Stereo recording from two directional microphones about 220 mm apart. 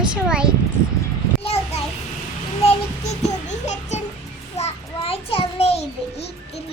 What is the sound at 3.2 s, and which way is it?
Music, 30° left (ahead or behind).